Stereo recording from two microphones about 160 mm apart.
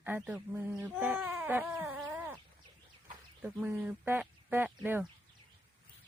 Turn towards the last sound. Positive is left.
turn(degrees=-10)  # may be behind; listen again after turning